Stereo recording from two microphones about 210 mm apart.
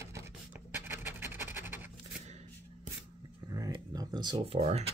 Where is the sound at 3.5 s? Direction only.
15° right (ahead or behind).